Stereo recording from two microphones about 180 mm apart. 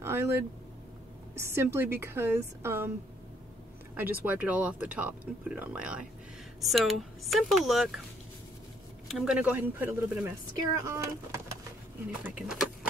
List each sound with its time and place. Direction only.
0.0 s a woman's voice: 15° right (ahead or behind)
4.3 s a woman's voice: 5° right (ahead or behind)
9.0 s a woman's voice: centre (ahead or behind)
12.1 s speech: 5° right (ahead or behind)